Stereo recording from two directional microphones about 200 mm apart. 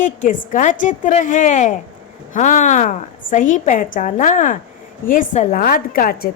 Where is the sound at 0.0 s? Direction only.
40° left (ahead or behind).